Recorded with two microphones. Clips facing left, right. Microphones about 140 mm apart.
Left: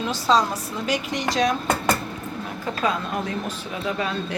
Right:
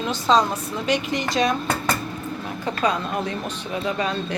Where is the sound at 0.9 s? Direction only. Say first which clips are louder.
Right 2 dB; centre (ahead or behind).